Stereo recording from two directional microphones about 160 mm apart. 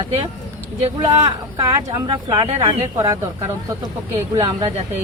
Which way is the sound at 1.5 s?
25° right (ahead or behind).